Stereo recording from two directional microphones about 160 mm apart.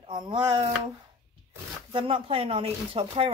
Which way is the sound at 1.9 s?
35° right (ahead or behind).